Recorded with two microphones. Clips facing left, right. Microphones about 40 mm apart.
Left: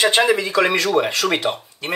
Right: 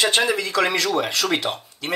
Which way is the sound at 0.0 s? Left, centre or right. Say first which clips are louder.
Left 4 dB; left.